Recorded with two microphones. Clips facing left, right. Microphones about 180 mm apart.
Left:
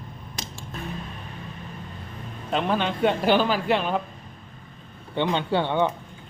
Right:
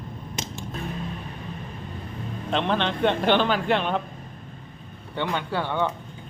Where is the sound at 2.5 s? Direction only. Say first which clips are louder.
Even; 5° left (ahead or behind).